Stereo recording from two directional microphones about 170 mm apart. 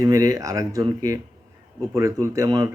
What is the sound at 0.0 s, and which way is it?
Speech, 20° right (ahead or behind).